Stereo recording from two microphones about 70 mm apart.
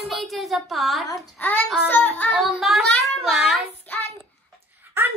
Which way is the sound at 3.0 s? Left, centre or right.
Centre.